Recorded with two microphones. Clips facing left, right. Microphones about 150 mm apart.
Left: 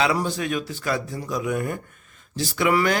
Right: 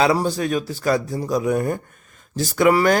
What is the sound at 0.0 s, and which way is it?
Speech, 35° right (ahead or behind).